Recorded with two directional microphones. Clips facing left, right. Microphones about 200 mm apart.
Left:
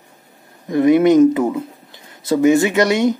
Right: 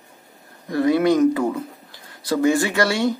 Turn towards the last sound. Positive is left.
turn(degrees=20)  # may be behind; listen again after turning